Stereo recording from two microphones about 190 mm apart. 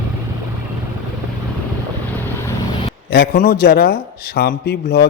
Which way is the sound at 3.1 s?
55° left (ahead or behind).